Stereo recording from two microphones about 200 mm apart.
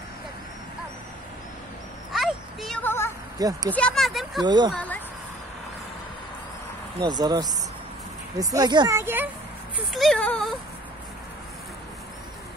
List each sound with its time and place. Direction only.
2.1 s vehicle: centre (ahead or behind)
3.3 s speech: 20° right (ahead or behind)
3.7 s speech: 5° left (ahead or behind)
4.4 s speech: 20° right (ahead or behind)
4.7 s a sound: 10° left (ahead or behind)
7.0 s speech: 20° right (ahead or behind)
9.9 s speech: centre (ahead or behind)